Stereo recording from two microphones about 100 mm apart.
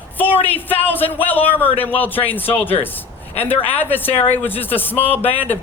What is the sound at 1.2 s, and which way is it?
A man's voice, 20° left (ahead or behind).